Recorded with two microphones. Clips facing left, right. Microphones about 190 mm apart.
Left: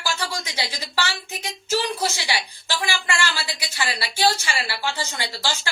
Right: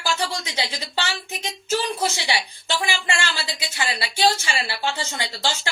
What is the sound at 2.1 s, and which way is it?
A woman's voice, 25° right (ahead or behind).